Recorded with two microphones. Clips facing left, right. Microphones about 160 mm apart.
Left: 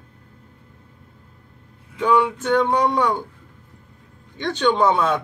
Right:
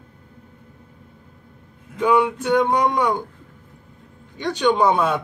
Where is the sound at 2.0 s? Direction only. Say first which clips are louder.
Right 1 dB; 10° right (ahead or behind).